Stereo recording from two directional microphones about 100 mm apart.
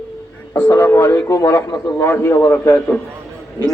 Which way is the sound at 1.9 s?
25° left (ahead or behind).